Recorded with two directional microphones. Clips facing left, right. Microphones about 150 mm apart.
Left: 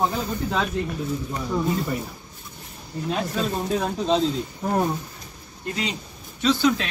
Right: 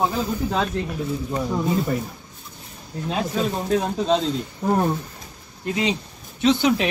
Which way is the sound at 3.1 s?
5° right (ahead or behind).